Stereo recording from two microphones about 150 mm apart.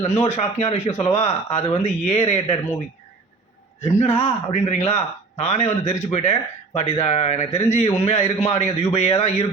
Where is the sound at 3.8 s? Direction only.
45° left (ahead or behind).